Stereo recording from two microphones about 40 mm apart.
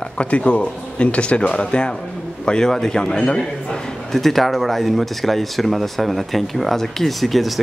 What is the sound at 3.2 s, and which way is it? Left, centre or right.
Speech, left.